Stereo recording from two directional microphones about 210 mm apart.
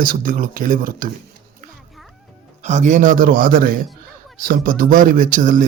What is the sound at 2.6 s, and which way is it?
Speech, 35° right (ahead or behind).